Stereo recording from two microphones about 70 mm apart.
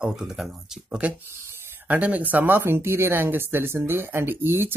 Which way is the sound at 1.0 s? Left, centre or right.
Centre.